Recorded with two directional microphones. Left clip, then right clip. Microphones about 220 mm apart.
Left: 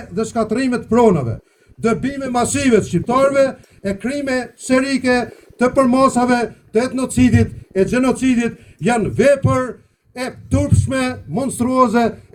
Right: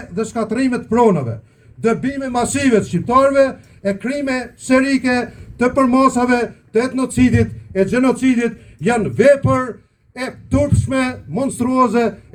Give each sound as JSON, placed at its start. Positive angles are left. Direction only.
{"t": 0.1, "sound": "a man's voice", "side_deg": 55}